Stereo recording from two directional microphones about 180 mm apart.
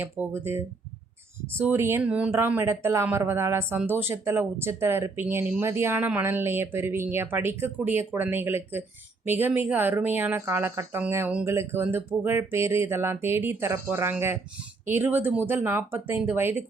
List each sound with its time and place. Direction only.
0.0 s speech: 10° right (ahead or behind)